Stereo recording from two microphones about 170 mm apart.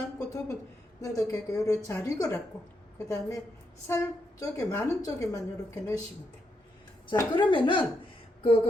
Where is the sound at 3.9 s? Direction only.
20° left (ahead or behind).